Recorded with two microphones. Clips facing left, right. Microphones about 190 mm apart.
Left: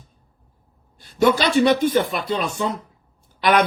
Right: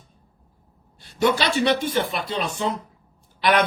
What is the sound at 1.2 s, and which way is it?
A man's voice, 45° left (ahead or behind).